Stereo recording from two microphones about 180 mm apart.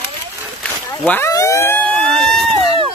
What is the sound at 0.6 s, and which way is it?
Vehicle, 10° left (ahead or behind).